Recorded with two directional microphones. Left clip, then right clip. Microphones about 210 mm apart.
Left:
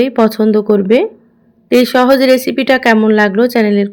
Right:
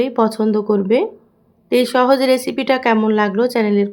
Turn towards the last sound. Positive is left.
turn(degrees=15)  # may be behind; listen again after turning